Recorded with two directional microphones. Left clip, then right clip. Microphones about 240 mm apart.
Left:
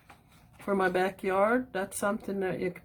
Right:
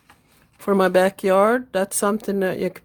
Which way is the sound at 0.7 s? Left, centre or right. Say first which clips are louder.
Right 10 dB; right.